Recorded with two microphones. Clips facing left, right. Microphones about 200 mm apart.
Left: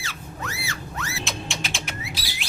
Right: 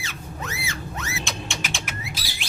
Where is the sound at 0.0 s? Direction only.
20° right (ahead or behind).